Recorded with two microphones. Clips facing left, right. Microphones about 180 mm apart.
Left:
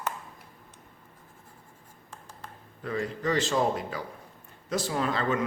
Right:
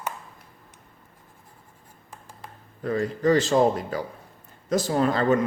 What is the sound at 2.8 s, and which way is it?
Speech, 40° right (ahead or behind).